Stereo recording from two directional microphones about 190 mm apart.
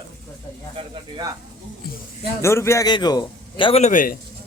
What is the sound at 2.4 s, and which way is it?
A man's voice, 15° left (ahead or behind).